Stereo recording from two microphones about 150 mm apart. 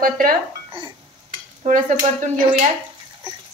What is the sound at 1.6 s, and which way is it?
Stir, 50° right (ahead or behind).